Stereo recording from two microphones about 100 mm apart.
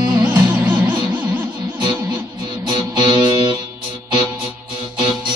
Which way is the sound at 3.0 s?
50° right (ahead or behind).